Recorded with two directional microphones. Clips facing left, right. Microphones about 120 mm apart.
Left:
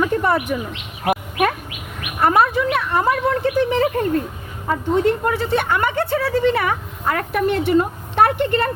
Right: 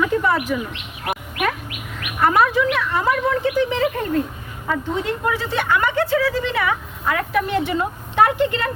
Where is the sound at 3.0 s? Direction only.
40° left (ahead or behind).